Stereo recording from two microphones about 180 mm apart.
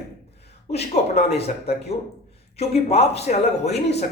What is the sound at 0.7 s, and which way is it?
A man's voice, 35° left (ahead or behind).